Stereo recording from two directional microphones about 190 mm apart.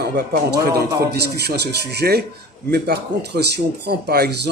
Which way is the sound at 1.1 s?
60° right (ahead or behind).